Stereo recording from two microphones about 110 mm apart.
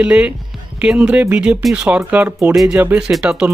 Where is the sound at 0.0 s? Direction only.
10° right (ahead or behind).